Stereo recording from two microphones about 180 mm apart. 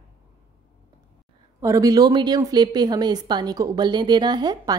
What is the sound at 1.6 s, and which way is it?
A woman's voice, 20° right (ahead or behind).